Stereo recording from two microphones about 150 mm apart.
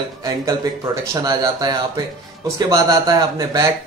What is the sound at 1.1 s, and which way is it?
A man's voice, 25° right (ahead or behind).